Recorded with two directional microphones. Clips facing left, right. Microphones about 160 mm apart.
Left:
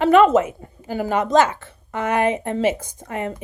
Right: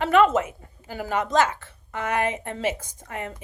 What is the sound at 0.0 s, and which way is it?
A woman's voice, 20° left (ahead or behind).